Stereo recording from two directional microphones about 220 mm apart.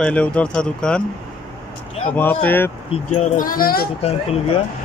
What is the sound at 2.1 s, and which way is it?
Speech, 10° left (ahead or behind).